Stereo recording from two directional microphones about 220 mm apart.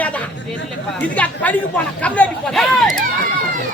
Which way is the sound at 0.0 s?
5° left (ahead or behind).